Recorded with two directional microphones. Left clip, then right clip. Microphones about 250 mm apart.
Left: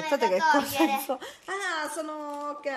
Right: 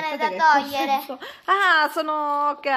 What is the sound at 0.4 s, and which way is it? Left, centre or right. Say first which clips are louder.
Speech: right 5 dB; centre.